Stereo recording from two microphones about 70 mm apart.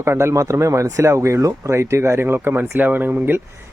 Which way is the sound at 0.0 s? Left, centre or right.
Right.